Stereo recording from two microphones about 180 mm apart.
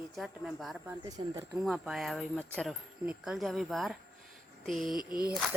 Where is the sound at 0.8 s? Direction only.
20° right (ahead or behind).